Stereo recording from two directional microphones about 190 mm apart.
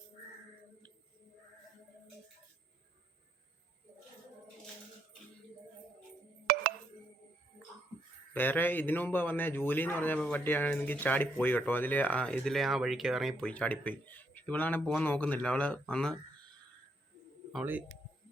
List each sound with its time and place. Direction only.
6.5 s music: 50° right (ahead or behind)
8.3 s speech: 10° left (ahead or behind)
17.5 s speech: 5° right (ahead or behind)